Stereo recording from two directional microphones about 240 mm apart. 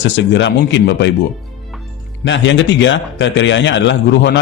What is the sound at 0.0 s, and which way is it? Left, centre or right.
A man's voice, left.